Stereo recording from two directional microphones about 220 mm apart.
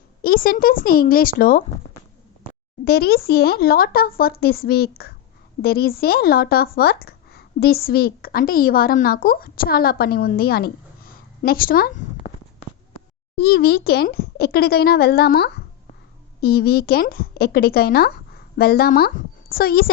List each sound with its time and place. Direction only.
0.2 s speech: 40° left (ahead or behind)
2.8 s speech: 45° left (ahead or behind)
13.3 s a woman's voice: 45° left (ahead or behind)